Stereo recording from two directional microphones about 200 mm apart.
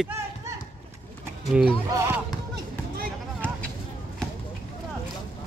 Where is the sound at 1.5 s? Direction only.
5° right (ahead or behind).